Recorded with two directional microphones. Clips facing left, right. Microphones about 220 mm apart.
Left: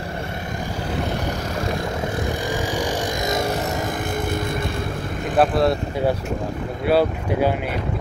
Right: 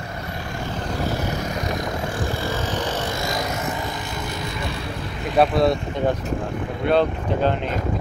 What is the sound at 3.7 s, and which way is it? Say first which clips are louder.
Vehicle: left 5 dB; 55° left (ahead or behind).